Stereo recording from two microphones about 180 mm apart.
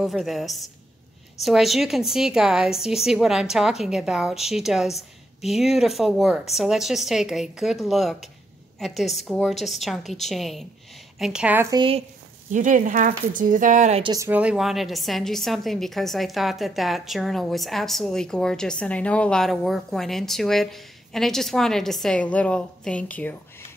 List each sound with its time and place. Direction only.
0.0 s a woman's voice: centre (ahead or behind)
11.7 s speech: 25° right (ahead or behind)
12.4 s speech: 45° right (ahead or behind)
14.0 s speech: 20° right (ahead or behind)
14.3 s a woman's voice: 5° right (ahead or behind)